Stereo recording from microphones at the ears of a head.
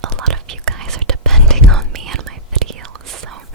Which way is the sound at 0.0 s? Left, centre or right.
Right.